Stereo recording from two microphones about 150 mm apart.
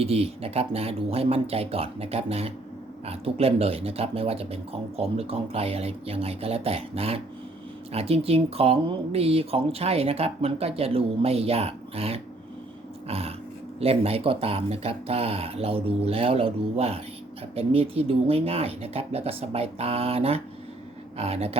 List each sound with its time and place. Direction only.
0.0 s speech: 40° right (ahead or behind)
13.1 s a sound: 40° right (ahead or behind)
13.7 s speech: 40° right (ahead or behind)